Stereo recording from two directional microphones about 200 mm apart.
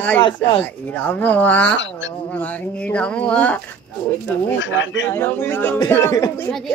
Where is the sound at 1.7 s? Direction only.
65° left (ahead or behind).